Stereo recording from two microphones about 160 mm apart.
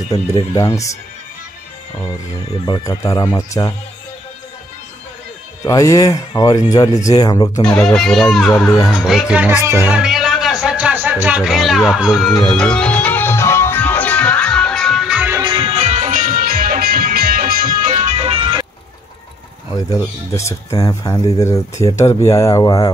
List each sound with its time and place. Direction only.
0.1 s speech: 25° left (ahead or behind)
2.6 s speech: 25° left (ahead or behind)
5.6 s speech: 20° left (ahead or behind)
7.6 s speech: 5° left (ahead or behind); by 9.9 s 15° right (ahead or behind)
10.0 s music: centre (ahead or behind)
15.4 s music: 30° right (ahead or behind)
15.7 s music: 45° right (ahead or behind); by 17.9 s 60° right (ahead or behind)
17.9 s music: 40° right (ahead or behind)
20.0 s speech: 20° left (ahead or behind)